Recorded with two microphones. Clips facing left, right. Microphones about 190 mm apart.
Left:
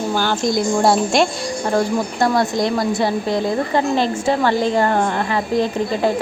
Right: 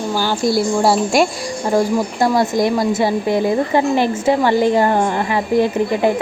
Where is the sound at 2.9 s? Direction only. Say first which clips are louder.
Right 2 dB; 15° right (ahead or behind).